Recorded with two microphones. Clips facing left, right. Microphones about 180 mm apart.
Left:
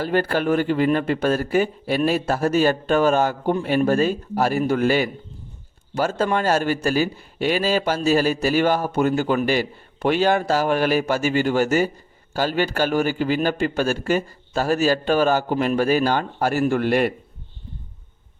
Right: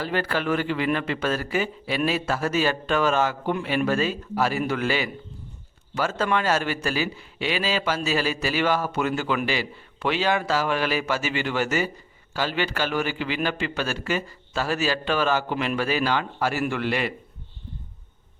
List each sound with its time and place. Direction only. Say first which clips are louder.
0.0 s speech: left 5 dB; 50° left (ahead or behind)